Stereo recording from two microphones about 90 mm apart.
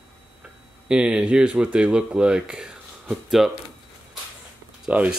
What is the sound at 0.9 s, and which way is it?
Speech, 10° right (ahead or behind).